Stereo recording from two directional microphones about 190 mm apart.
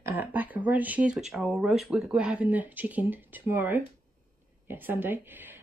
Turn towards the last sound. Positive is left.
turn(degrees=-10)  # may be behind; listen again after turning